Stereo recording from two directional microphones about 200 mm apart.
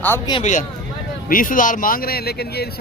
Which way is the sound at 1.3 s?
45° left (ahead or behind).